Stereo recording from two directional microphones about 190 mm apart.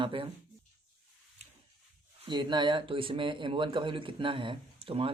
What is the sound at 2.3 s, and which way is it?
Speech, 25° right (ahead or behind).